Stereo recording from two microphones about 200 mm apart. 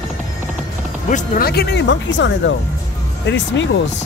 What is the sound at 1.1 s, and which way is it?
Speech, 45° left (ahead or behind).